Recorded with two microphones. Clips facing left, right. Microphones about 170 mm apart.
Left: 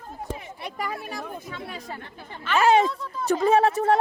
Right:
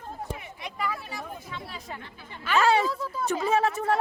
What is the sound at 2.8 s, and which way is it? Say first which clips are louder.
Speech: left 1 dB; 5° right (ahead or behind).